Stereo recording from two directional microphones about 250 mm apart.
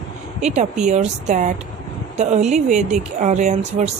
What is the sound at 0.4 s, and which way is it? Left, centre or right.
Speech, right.